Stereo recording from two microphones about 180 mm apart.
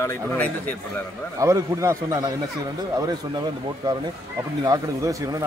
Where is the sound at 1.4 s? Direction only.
15° right (ahead or behind).